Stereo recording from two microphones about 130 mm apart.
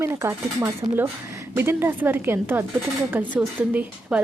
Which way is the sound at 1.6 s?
20° right (ahead or behind).